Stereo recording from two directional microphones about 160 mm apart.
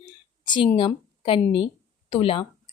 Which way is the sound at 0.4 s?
30° left (ahead or behind).